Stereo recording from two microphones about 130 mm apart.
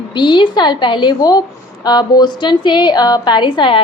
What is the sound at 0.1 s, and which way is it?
A woman's voice, 35° left (ahead or behind).